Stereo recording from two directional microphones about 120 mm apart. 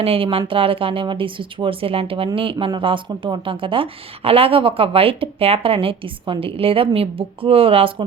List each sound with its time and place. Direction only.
0.0 s a woman's voice: 50° right (ahead or behind)